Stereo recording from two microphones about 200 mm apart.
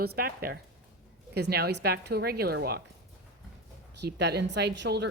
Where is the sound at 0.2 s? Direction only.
50° right (ahead or behind).